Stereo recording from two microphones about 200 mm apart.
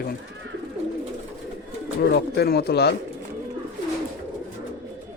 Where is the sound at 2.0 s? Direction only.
55° left (ahead or behind).